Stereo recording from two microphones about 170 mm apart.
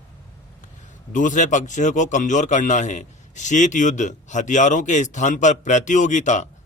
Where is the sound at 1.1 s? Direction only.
50° left (ahead or behind).